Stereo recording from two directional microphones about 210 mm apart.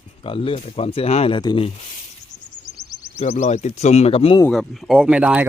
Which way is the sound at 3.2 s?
30° left (ahead or behind).